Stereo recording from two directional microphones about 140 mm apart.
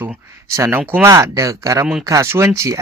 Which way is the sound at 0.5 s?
20° right (ahead or behind).